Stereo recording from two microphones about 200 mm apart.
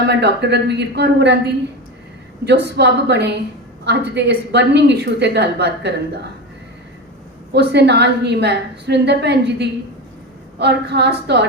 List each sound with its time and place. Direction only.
0.1 s a woman's voice: 55° right (ahead or behind)
2.5 s a woman's voice: 55° right (ahead or behind)
7.5 s a woman's voice: 55° right (ahead or behind)